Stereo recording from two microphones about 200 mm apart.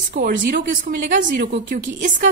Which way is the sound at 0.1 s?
45° right (ahead or behind).